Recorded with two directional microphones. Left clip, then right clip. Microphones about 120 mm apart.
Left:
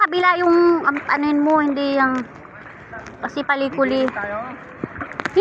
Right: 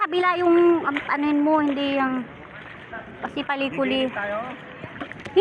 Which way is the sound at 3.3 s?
10° left (ahead or behind).